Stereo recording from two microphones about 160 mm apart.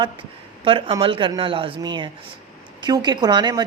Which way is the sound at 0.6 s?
30° right (ahead or behind).